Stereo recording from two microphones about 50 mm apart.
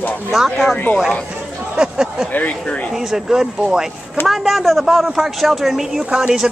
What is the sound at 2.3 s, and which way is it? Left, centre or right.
Speech, left.